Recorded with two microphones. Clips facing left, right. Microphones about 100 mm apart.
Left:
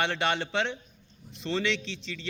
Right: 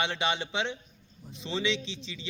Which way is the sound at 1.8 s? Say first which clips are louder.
Left 2 dB; 15° right (ahead or behind).